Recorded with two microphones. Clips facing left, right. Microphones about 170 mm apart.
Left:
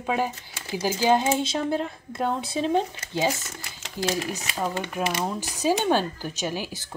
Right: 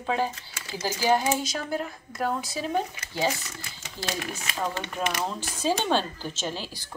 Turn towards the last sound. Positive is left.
turn(degrees=15)  # may be behind; listen again after turning